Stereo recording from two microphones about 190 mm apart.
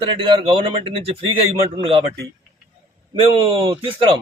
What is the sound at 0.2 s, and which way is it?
A man's voice, 25° right (ahead or behind).